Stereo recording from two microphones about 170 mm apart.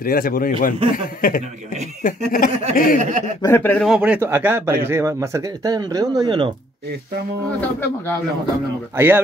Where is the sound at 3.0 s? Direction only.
45° right (ahead or behind).